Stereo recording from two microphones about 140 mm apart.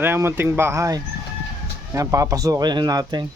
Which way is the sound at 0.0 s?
15° right (ahead or behind).